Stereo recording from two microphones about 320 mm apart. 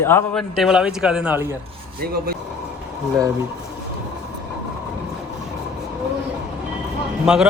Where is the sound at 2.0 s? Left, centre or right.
Right.